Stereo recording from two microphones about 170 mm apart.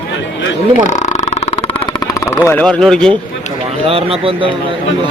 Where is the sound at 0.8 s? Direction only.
45° left (ahead or behind).